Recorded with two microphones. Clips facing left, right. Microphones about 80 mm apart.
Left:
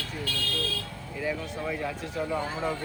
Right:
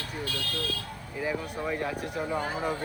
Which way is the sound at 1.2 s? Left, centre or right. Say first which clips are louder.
Even; centre.